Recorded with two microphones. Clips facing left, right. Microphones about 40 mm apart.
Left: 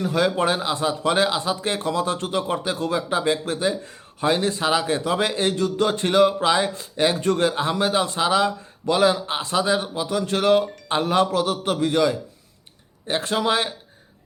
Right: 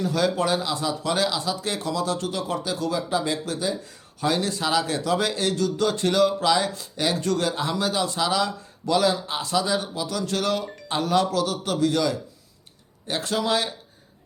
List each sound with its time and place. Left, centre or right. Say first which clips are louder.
0.0 s a man's voice: left 2 dB; left